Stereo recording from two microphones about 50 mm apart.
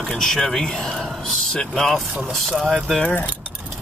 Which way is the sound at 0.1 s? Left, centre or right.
Centre.